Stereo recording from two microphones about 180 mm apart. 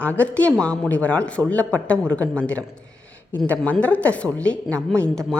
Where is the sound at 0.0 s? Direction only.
10° left (ahead or behind).